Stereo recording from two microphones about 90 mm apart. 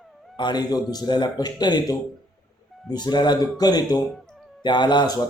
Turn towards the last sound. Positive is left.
turn(degrees=55)  # may be behind; listen again after turning